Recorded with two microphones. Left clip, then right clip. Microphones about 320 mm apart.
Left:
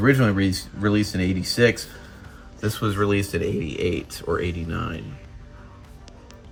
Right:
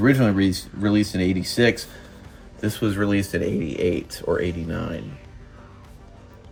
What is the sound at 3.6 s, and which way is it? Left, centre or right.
Speech, left.